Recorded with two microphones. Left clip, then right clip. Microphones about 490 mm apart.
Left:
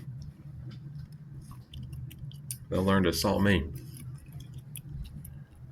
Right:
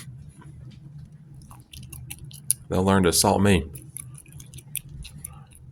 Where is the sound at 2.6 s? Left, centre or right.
Right.